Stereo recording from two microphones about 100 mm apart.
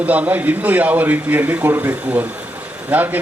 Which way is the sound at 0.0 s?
15° right (ahead or behind).